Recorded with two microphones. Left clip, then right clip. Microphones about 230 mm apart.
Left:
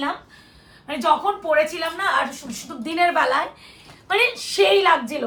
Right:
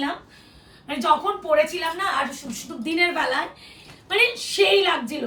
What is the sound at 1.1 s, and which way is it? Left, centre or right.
Speech, left.